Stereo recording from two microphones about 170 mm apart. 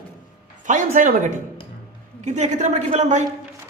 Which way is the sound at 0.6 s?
50° right (ahead or behind).